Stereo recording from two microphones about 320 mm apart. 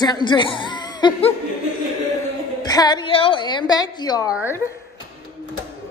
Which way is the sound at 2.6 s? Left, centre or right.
Centre.